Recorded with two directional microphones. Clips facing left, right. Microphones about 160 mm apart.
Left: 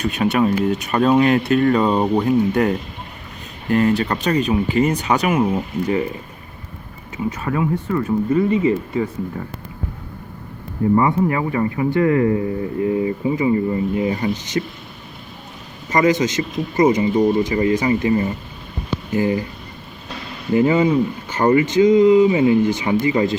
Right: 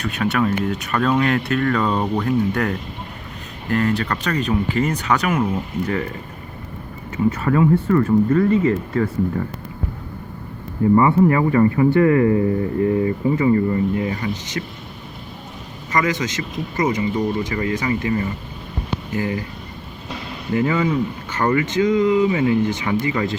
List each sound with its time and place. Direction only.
0.0 s speech: 15° left (ahead or behind)
7.3 s speech: 15° left (ahead or behind)
10.9 s speech: 15° left (ahead or behind)
15.9 s speech: 25° left (ahead or behind)
20.5 s speech: 25° left (ahead or behind)